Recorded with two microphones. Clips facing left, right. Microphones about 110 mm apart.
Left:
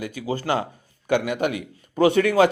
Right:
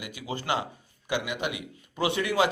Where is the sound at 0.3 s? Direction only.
40° left (ahead or behind).